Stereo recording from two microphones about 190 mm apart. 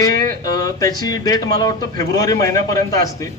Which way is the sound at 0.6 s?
20° left (ahead or behind).